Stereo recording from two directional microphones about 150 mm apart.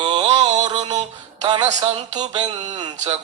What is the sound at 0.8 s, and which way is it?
Mantra, 50° right (ahead or behind).